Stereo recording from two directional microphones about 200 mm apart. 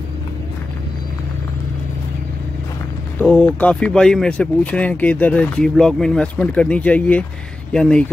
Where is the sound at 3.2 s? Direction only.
5° left (ahead or behind).